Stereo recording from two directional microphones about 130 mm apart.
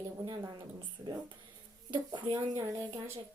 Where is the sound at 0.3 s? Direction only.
35° right (ahead or behind).